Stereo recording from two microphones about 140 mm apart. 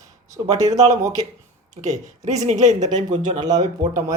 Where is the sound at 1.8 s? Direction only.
60° right (ahead or behind).